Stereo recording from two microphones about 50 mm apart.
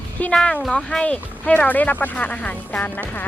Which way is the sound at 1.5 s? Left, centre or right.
Left.